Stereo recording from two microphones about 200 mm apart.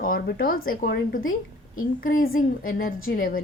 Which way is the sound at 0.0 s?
45° left (ahead or behind).